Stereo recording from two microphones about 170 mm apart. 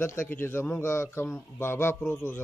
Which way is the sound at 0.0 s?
15° left (ahead or behind).